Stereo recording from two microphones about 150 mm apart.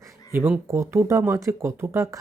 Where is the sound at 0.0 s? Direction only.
15° right (ahead or behind).